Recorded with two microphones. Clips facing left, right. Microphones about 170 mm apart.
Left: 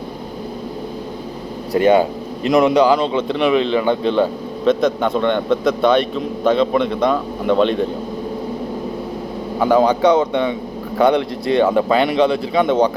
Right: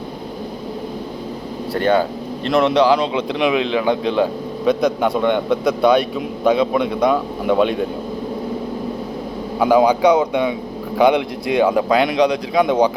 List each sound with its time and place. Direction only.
1.8 s a man's voice: 10° left (ahead or behind); by 7.9 s 10° right (ahead or behind)
9.6 s a man's voice: 5° right (ahead or behind)